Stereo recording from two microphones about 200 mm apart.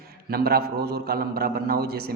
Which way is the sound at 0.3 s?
50° right (ahead or behind).